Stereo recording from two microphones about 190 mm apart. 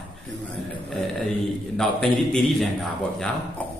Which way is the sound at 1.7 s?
5° left (ahead or behind).